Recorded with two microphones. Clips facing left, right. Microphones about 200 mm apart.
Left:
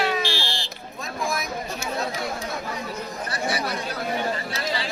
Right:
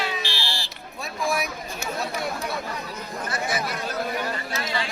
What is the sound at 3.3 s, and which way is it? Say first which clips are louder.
Chatter: even; 35° left (ahead or behind).